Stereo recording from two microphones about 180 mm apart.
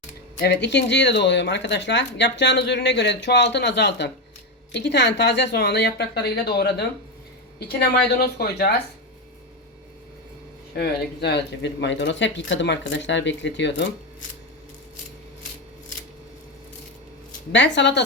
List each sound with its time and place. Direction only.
0.3 s a woman's voice: 70° left (ahead or behind)
10.8 s speech: 65° left (ahead or behind)
17.5 s speech: 85° left